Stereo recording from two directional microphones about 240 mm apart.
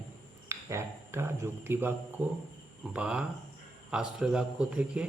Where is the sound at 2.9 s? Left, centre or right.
Centre.